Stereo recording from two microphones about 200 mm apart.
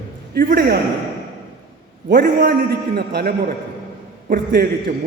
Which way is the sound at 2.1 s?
50° right (ahead or behind).